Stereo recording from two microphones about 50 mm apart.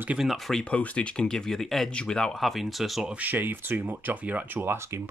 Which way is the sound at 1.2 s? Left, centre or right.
Centre.